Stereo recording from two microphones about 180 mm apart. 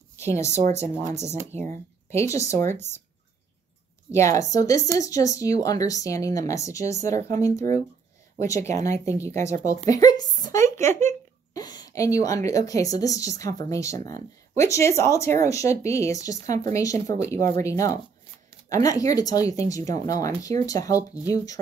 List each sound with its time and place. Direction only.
0.2 s speech: 15° left (ahead or behind)
0.7 s speech: 40° right (ahead or behind)
1.5 s speech: 15° left (ahead or behind)
4.1 s speech: 15° left (ahead or behind)
9.8 s a sound: 20° left (ahead or behind)
12.4 s speech: 20° left (ahead or behind)